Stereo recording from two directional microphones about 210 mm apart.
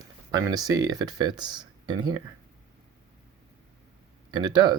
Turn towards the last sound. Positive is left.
turn(degrees=-20)  # may be behind; listen again after turning